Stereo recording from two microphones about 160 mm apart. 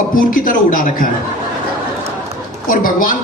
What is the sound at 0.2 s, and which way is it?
Speech, 60° left (ahead or behind).